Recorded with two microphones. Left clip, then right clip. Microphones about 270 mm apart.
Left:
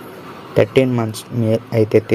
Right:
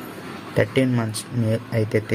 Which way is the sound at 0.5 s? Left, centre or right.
Centre.